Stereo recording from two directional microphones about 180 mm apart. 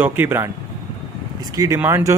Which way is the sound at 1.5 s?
15° right (ahead or behind).